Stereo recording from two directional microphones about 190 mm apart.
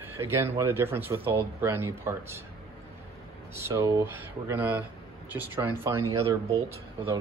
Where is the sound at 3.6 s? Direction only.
15° right (ahead or behind).